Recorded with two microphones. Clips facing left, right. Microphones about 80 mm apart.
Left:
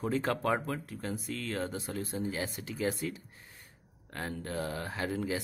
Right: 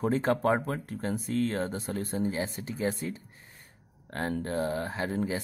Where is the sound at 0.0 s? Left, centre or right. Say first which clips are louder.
Right 5 dB; right.